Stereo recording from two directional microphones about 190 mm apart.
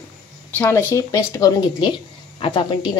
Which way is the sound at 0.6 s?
15° left (ahead or behind).